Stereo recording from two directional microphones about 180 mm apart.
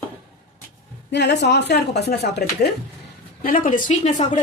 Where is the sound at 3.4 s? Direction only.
50° left (ahead or behind).